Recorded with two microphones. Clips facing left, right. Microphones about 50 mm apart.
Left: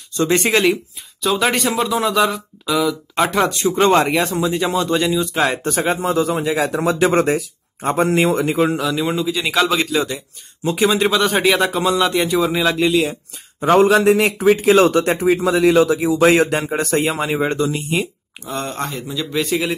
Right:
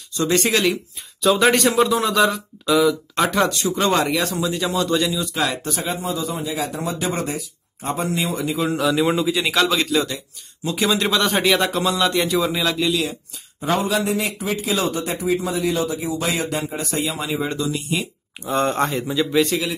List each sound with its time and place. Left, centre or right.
0.1 s speech: left
1.2 s a man's voice: centre
3.4 s speech: left
8.0 s speech: left
8.7 s a man's voice: centre
12.6 s speech: left
13.6 s speech: left
14.9 s speech: left
18.8 s a man's voice: centre
19.3 s a man's voice: centre